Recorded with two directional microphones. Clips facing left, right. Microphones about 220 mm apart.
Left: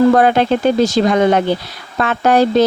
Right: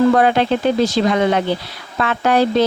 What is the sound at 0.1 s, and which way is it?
Speech, 45° left (ahead or behind).